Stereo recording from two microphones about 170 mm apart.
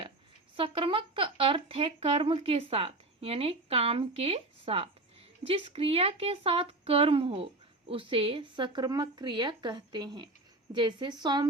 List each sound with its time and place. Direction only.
0.5 s a woman's voice: 30° right (ahead or behind)